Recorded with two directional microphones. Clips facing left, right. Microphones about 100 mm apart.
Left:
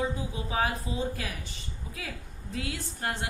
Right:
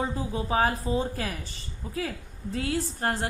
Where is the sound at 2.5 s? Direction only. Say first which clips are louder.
Right 7 dB; 35° right (ahead or behind).